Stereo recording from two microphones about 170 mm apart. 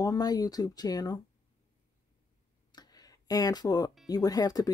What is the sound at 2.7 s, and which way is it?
Speech, 20° left (ahead or behind).